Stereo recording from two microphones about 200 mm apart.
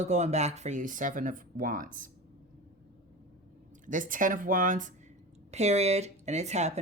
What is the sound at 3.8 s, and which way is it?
Speech, 40° right (ahead or behind).